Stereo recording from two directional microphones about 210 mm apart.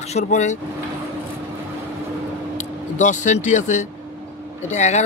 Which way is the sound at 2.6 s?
35° left (ahead or behind).